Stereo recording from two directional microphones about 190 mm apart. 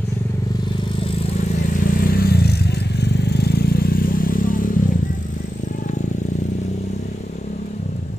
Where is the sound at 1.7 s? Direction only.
45° left (ahead or behind).